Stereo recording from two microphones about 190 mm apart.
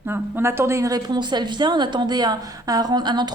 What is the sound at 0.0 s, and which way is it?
A woman's voice, 10° right (ahead or behind).